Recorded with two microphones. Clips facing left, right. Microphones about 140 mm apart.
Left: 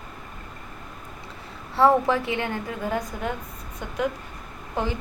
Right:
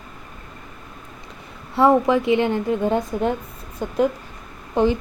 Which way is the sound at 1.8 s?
15° right (ahead or behind).